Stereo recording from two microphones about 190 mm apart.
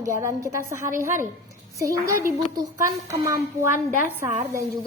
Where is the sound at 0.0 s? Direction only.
15° right (ahead or behind).